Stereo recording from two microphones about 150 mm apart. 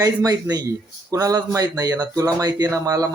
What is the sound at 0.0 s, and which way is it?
Speech, 25° right (ahead or behind).